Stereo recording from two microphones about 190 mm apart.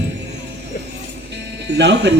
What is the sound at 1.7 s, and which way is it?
Speech, 65° right (ahead or behind).